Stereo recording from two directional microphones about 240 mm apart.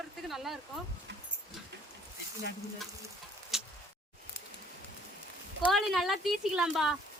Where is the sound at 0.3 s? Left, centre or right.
Centre.